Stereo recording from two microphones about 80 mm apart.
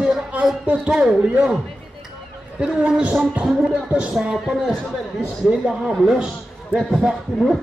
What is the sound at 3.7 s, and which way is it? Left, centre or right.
A man's voice, centre.